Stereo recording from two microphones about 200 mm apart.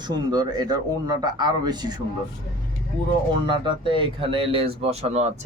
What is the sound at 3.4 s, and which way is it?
Speech, 25° right (ahead or behind).